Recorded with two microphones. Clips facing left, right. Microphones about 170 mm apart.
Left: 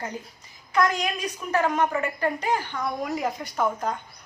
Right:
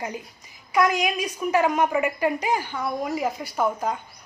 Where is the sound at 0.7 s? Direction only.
10° right (ahead or behind).